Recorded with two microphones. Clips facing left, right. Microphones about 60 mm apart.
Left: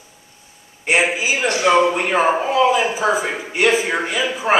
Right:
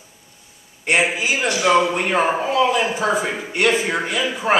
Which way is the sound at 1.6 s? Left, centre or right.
Left.